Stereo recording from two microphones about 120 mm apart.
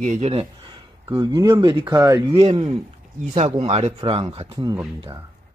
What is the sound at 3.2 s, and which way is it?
A man's voice, 70° right (ahead or behind).